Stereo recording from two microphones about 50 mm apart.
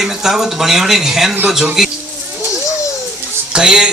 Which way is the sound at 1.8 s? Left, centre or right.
Centre.